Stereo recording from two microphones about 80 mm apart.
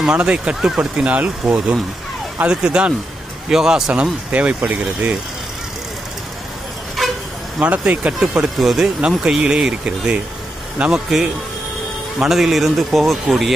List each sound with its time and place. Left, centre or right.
0.0 s speech: centre
3.9 s speech: centre
7.6 s speech: centre